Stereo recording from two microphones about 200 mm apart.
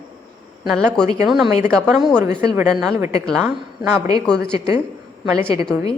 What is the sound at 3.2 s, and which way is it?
Speech, centre (ahead or behind).